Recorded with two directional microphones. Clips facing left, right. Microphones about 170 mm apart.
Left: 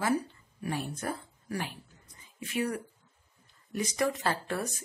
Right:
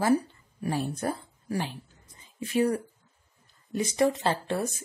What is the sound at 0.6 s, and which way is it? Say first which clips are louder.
Speech: right 5 dB; 35° right (ahead or behind).